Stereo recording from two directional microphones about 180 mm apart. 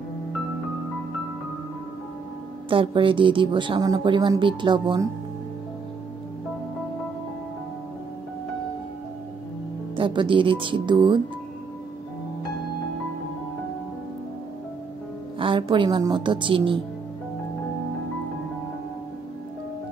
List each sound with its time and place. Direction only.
2.7 s a woman's voice: 30° right (ahead or behind)
9.9 s a woman's voice: 30° right (ahead or behind)
15.3 s a woman's voice: 30° right (ahead or behind)